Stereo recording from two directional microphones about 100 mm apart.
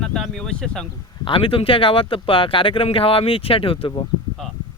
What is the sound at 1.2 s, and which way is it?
Speech, 60° left (ahead or behind).